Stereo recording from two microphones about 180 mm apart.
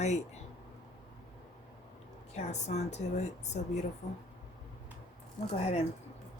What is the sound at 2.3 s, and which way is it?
Speech, 40° left (ahead or behind).